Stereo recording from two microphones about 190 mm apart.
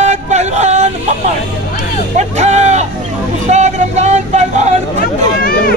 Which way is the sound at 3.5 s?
40° right (ahead or behind).